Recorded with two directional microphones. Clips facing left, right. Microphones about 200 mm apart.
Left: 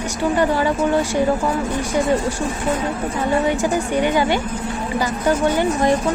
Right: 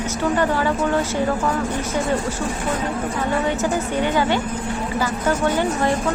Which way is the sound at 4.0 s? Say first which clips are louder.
Left 2 dB; 15° left (ahead or behind).